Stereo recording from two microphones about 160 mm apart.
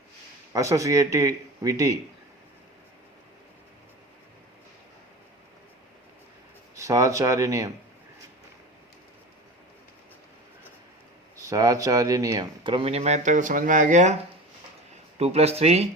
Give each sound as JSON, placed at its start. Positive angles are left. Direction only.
{"t": 0.5, "sound": "speech", "side_deg": -20}
{"t": 6.7, "sound": "speech", "side_deg": -20}
{"t": 11.3, "sound": "speech", "side_deg": -20}
{"t": 15.2, "sound": "speech", "side_deg": -40}